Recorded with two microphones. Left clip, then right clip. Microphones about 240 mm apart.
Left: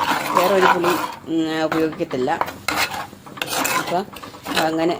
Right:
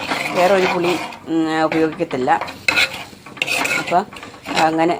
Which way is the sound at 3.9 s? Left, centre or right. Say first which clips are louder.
Right 6 dB; centre.